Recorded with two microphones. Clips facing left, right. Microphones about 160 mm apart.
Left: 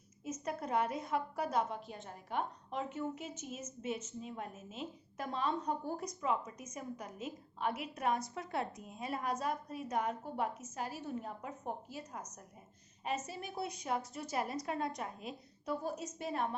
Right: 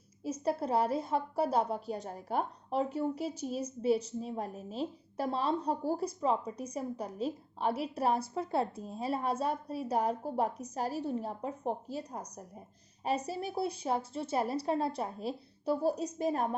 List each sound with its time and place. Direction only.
0.3 s a woman's voice: 30° right (ahead or behind)